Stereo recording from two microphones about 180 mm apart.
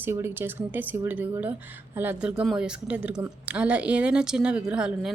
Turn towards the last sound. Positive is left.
turn(degrees=-5)  # may be behind; listen again after turning